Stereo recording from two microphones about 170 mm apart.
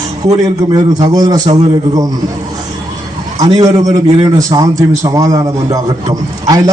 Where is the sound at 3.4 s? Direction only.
20° right (ahead or behind).